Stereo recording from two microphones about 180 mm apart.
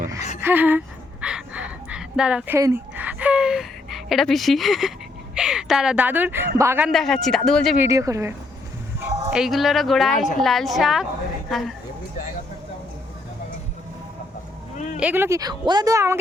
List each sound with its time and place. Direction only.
0.2 s speech: 40° left (ahead or behind)
0.4 s speech: 10° right (ahead or behind)
1.2 s a sound: 5° right (ahead or behind)
2.6 s a woman's voice: 15° right (ahead or behind)
6.9 s speech: centre (ahead or behind)
7.8 s speech: 15° right (ahead or behind)
9.0 s a woman's voice: 5° right (ahead or behind)
14.9 s speech: 10° right (ahead or behind)